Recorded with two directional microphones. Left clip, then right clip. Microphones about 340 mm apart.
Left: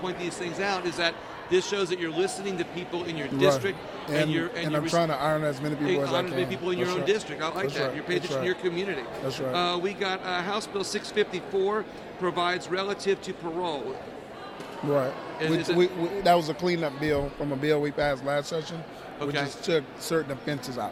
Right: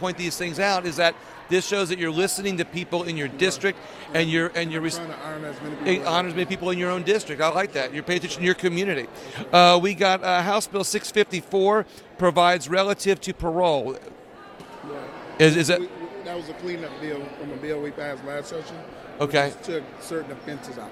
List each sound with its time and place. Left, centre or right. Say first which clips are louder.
0.0 s a man's voice: right 4 dB; right
4.9 s speech: left 9 dB; left
5.8 s a man's voice: right 4 dB; right
15.4 s a man's voice: right 10 dB; right
15.8 s a man's voice: left 8 dB; left
19.2 s a man's voice: right 8 dB; right
19.6 s speech: left 3 dB; left